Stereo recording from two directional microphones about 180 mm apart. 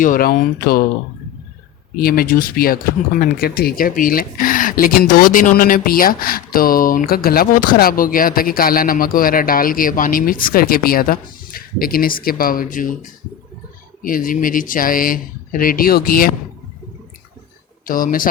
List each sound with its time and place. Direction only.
0.0 s speech: 50° left (ahead or behind)
2.0 s speech: 55° left (ahead or behind)
17.8 s speech: 50° left (ahead or behind)